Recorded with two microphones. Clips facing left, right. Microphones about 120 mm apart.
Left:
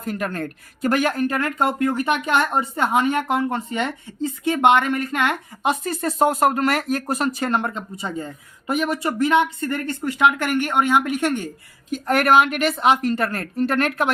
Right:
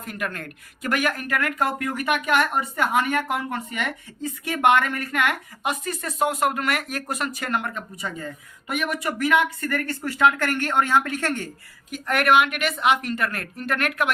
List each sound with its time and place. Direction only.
0.0 s speech: 35° left (ahead or behind); by 11.4 s 15° left (ahead or behind)
11.9 s a woman's voice: 30° left (ahead or behind)